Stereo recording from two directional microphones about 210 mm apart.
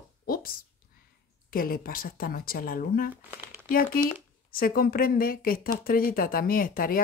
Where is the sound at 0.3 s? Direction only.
45° left (ahead or behind).